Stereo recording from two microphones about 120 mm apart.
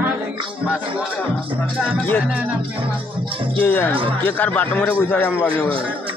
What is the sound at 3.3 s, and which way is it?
Speech, 50° right (ahead or behind).